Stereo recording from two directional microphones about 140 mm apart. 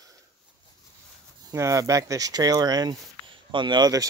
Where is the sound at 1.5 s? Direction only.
20° right (ahead or behind).